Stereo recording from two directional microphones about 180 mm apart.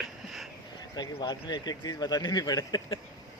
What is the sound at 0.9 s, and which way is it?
Speech, 25° left (ahead or behind).